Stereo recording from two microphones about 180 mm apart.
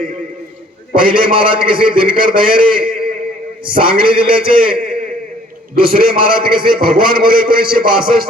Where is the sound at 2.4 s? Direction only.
50° right (ahead or behind).